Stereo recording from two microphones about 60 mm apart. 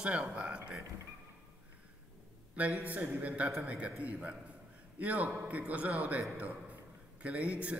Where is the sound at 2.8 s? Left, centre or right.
Right.